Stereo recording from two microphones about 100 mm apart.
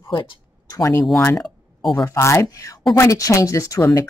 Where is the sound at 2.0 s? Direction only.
25° left (ahead or behind).